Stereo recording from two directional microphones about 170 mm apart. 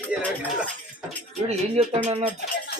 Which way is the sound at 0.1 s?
5° right (ahead or behind).